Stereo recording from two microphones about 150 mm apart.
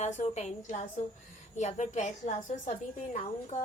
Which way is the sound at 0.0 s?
50° left (ahead or behind).